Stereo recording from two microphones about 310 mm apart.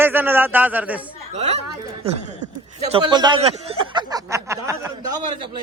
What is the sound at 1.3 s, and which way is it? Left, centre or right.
Speech, right.